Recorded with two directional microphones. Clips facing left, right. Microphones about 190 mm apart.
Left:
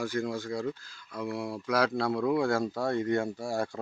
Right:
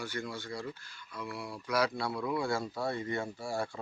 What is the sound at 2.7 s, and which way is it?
Speech, 50° left (ahead or behind).